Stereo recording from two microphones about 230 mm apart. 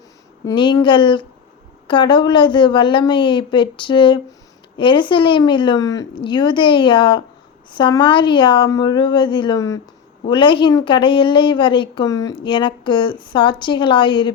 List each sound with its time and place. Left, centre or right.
0.4 s a woman's voice: centre